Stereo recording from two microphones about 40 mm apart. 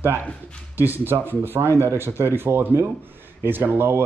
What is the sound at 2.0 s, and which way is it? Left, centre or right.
Speech, right.